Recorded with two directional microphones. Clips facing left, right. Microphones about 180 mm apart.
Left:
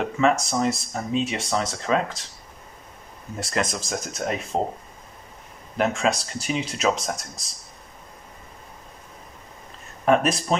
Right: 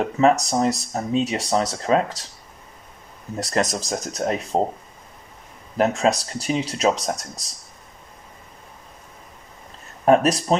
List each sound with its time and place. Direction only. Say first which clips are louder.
0.2 s speech: right 3 dB; 35° right (ahead or behind)
3.3 s speech: right 4 dB; 40° right (ahead or behind)
5.8 s speech: right 3 dB; 35° right (ahead or behind)
10.0 s speech: right 3 dB; 35° right (ahead or behind)